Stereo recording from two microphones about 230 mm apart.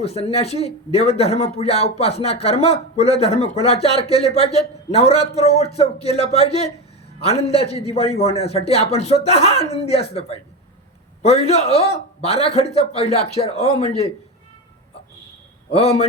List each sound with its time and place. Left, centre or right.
0.0 s speech: left
15.7 s speech: left